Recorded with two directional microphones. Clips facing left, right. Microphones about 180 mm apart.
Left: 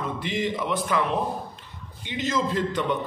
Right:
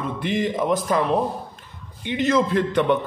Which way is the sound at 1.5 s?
55° right (ahead or behind).